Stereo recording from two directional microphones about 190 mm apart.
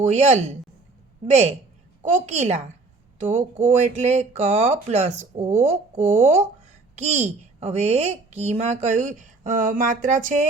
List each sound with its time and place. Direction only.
0.0 s a woman's voice: 35° right (ahead or behind)